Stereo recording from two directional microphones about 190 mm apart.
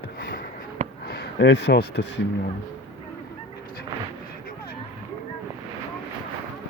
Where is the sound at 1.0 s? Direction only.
60° left (ahead or behind).